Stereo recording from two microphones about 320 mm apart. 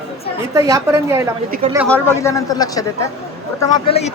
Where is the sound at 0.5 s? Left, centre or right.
Centre.